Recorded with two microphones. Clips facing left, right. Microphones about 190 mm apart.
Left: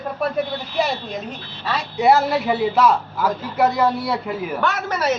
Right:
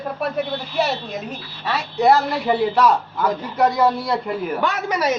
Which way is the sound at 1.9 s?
10° left (ahead or behind).